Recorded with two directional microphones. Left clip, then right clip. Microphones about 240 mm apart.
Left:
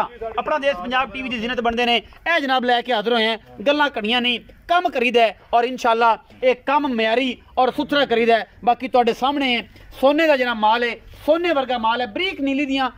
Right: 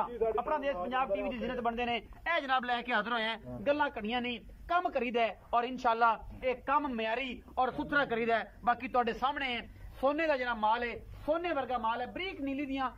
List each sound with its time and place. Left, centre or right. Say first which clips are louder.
0.0 s a man's voice: left 8 dB; left